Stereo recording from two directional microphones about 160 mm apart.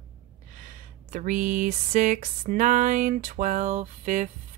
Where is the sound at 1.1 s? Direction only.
50° right (ahead or behind).